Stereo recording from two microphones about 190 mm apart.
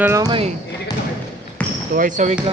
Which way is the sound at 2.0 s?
40° right (ahead or behind).